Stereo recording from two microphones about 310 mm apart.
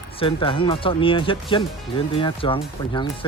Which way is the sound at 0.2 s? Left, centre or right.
Centre.